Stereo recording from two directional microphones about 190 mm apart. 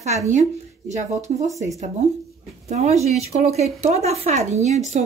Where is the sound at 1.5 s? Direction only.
15° right (ahead or behind).